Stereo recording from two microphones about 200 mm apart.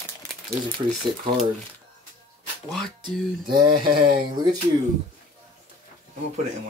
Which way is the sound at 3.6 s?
25° right (ahead or behind).